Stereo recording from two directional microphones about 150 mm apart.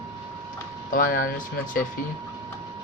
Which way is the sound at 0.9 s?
70° left (ahead or behind).